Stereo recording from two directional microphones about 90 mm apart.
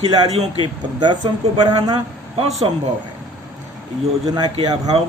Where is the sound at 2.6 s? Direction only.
75° right (ahead or behind).